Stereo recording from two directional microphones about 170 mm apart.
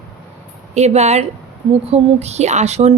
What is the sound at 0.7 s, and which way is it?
A woman's voice, 40° right (ahead or behind).